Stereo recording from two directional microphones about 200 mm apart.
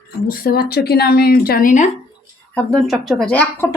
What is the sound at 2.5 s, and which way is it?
Speech, centre (ahead or behind).